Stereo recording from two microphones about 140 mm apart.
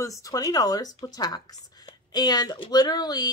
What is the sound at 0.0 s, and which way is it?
Speech, 25° left (ahead or behind).